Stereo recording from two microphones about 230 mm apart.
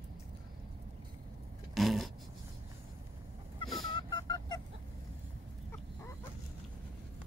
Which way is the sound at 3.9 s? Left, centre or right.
Centre.